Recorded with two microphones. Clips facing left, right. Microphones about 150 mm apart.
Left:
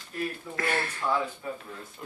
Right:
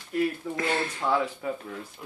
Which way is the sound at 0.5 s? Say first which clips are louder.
Right 2 dB; 20° right (ahead or behind).